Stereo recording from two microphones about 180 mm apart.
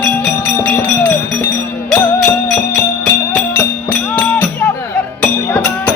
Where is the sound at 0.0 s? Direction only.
10° left (ahead or behind).